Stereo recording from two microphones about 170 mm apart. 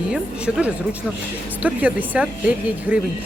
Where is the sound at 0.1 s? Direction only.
5° right (ahead or behind).